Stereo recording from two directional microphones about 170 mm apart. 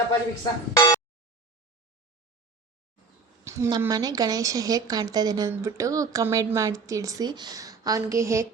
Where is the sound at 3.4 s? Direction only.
15° right (ahead or behind).